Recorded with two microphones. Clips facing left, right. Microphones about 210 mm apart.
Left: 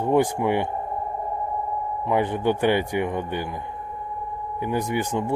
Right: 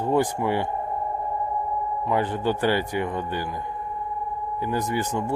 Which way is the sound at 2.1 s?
15° left (ahead or behind).